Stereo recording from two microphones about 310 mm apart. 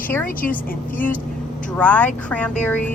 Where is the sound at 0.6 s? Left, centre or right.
Left.